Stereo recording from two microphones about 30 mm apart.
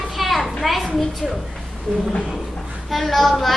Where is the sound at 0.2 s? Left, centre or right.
Centre.